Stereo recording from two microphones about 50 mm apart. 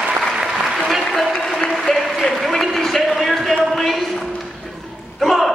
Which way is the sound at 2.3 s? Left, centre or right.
Centre.